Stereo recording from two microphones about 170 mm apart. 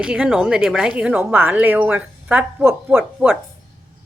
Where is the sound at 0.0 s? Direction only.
5° right (ahead or behind).